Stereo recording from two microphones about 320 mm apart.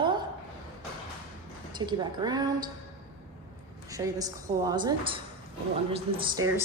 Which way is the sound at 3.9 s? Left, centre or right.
Centre.